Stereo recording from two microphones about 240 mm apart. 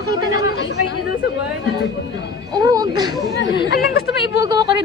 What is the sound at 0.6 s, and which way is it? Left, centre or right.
Speech, left.